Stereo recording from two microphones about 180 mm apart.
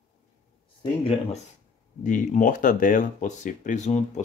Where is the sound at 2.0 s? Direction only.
45° left (ahead or behind).